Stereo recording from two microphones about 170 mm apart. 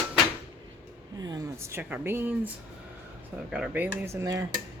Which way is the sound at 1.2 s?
20° right (ahead or behind).